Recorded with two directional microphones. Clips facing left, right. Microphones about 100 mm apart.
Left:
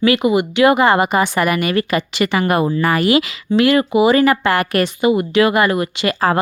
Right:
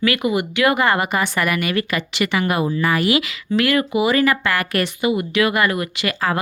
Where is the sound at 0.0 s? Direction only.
25° left (ahead or behind).